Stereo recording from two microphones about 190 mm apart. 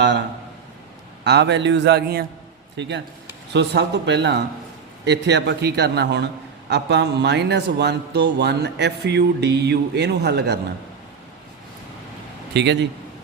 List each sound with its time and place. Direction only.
1.2 s speech: 65° right (ahead or behind)
2.7 s speech: 70° right (ahead or behind)
12.5 s speech: 65° right (ahead or behind)